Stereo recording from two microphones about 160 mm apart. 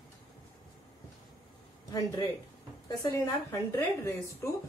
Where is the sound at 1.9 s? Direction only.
25° left (ahead or behind).